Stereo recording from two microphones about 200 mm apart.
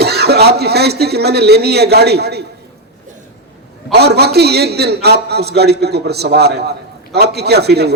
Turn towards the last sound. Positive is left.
turn(degrees=-55)  # may be behind; listen again after turning